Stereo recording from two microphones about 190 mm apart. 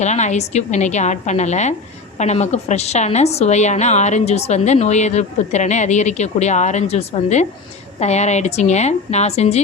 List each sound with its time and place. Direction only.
0.0 s a woman's voice: 35° left (ahead or behind)